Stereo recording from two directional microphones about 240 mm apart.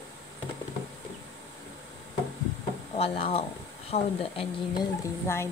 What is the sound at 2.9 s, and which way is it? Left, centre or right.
Speech, left.